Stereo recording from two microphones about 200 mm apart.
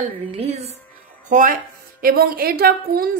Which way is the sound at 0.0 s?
30° right (ahead or behind).